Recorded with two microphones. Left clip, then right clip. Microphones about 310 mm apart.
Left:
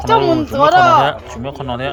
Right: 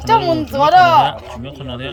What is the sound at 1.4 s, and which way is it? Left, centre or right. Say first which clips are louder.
Speech: left 10 dB; centre.